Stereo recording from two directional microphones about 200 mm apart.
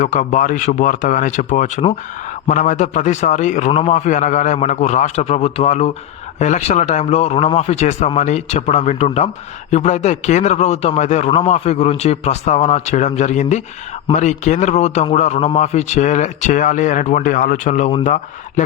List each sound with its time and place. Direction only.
0.0 s a man's voice: 35° left (ahead or behind)